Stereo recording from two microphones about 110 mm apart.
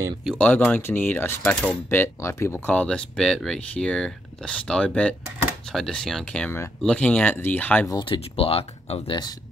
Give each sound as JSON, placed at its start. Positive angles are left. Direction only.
{"t": 0.4, "sound": "speech", "side_deg": 10}
{"t": 8.0, "sound": "speech", "side_deg": 55}